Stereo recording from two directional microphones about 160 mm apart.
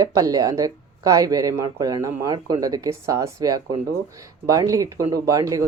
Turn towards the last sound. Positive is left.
turn(degrees=-20)  # may be behind; listen again after turning